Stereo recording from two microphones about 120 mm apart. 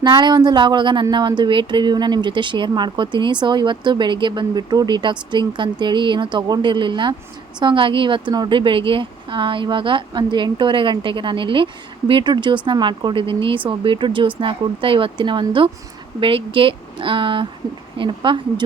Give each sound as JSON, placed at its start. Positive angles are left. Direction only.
{"t": 0.0, "sound": "a woman's voice", "side_deg": -40}